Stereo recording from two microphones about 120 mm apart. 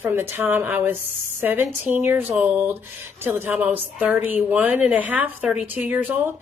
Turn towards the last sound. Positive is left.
turn(degrees=-15)  # may be behind; listen again after turning